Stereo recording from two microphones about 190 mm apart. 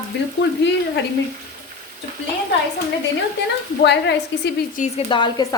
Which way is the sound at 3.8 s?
65° left (ahead or behind).